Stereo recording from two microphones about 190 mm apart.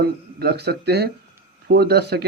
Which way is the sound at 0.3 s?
60° right (ahead or behind).